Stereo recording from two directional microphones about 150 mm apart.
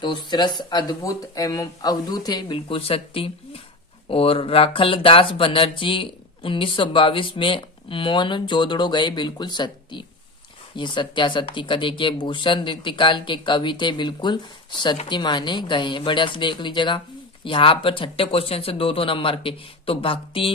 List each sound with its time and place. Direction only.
0.0 s speech: 30° left (ahead or behind)